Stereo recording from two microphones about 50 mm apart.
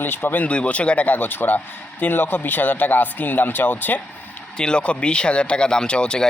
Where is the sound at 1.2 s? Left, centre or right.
Left.